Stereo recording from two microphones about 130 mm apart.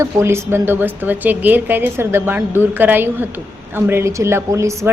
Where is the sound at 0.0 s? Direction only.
20° right (ahead or behind).